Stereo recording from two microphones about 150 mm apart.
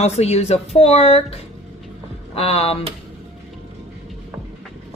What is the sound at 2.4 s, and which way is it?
Speech, 40° left (ahead or behind).